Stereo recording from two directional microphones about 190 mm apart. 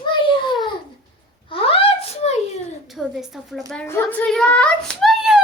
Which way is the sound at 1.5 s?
30° left (ahead or behind).